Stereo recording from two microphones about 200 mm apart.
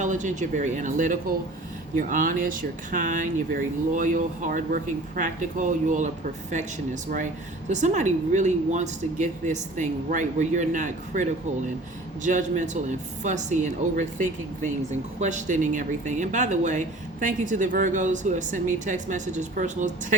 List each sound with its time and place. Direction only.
0.0 s speech: 40° right (ahead or behind)